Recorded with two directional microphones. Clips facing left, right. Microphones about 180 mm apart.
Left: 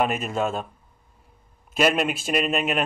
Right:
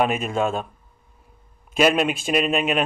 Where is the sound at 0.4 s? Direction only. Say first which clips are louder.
Right 2 dB; 50° right (ahead or behind).